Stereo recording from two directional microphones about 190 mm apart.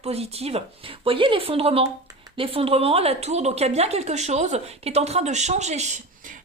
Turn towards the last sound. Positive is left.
turn(degrees=-35)  # may be behind; listen again after turning